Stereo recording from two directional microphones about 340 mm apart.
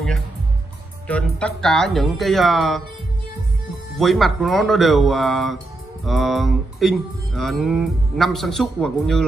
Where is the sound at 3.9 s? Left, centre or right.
Centre.